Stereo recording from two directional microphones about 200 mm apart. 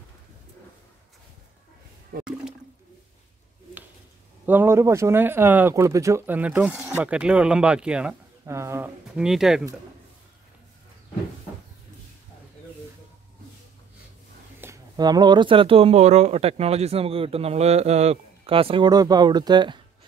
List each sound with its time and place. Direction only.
2.1 s speech: 50° right (ahead or behind)
4.5 s speech: 10° right (ahead or behind)
14.6 s speech: 15° right (ahead or behind)